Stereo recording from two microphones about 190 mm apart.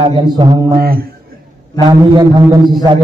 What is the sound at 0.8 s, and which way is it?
Speech, 50° right (ahead or behind).